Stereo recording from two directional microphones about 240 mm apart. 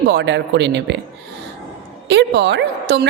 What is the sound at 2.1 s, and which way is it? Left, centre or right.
Speech, right.